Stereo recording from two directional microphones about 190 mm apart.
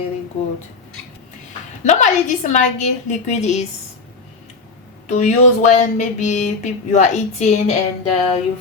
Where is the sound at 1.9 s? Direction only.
40° left (ahead or behind).